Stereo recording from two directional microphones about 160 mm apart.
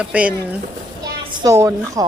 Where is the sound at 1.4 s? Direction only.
20° right (ahead or behind).